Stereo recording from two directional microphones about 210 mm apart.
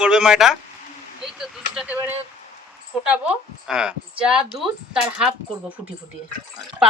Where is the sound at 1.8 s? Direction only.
5° right (ahead or behind).